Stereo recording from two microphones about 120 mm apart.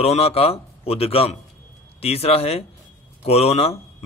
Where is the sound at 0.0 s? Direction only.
55° left (ahead or behind).